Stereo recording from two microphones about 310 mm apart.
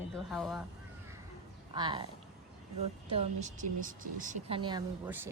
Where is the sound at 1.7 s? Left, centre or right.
Centre.